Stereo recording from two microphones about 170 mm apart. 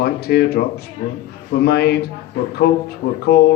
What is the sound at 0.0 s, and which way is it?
A man's voice, 70° left (ahead or behind).